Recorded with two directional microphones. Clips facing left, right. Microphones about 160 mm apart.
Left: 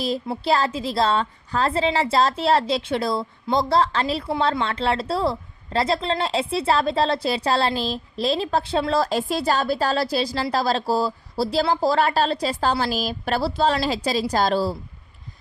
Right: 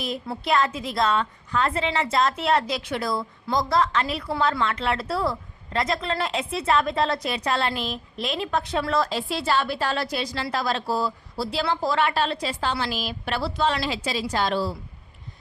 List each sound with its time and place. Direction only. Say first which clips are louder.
0.0 s a woman's voice: left 5 dB; 30° left (ahead or behind)
9.0 s a woman's voice: left 4 dB; 45° left (ahead or behind)